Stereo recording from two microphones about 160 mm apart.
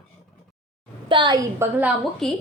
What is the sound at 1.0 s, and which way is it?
Speech, 30° right (ahead or behind).